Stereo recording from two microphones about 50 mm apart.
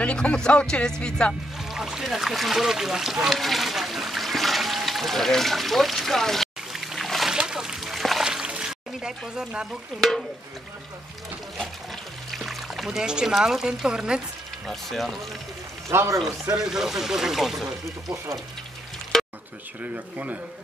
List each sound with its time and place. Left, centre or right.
0.0 s speech: left
1.6 s boat: centre
7.3 s a sound: centre
8.2 s a sound: centre
9.9 s speech: centre
12.3 s music: centre
13.0 s speech: centre
14.7 s speech: centre
15.9 s a man's voice: right
16.5 s speech: centre
19.1 s a sound: centre
19.8 s speech: right